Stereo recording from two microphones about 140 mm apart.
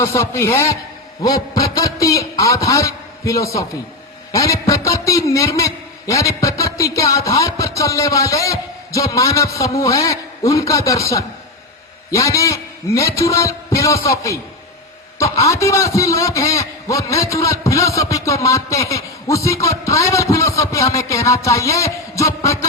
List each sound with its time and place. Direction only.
0.0 s a man's voice: 20° left (ahead or behind)